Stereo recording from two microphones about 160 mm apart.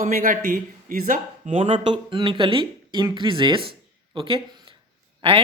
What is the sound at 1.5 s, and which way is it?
Speech, 35° right (ahead or behind).